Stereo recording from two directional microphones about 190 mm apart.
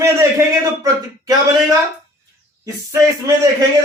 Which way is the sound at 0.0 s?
15° right (ahead or behind).